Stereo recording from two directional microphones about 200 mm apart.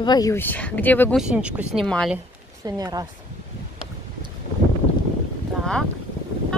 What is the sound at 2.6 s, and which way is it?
Speech, 20° right (ahead or behind).